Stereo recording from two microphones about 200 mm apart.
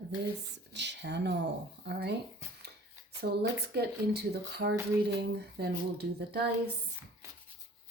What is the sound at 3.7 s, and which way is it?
Speech, 55° right (ahead or behind).